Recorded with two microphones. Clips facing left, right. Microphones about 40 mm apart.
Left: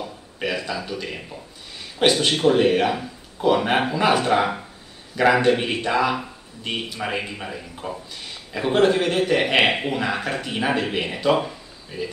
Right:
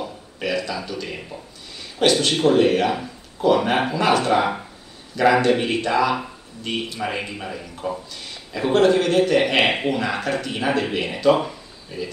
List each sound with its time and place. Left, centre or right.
0.4 s speech: centre
2.0 s speech: left
2.3 s speech: centre
4.2 s speech: centre